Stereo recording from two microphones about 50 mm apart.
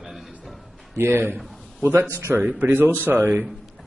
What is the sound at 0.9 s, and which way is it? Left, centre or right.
A man's voice, right.